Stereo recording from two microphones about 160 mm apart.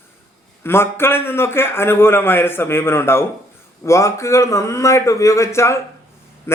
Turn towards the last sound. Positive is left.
turn(degrees=15)  # may be behind; listen again after turning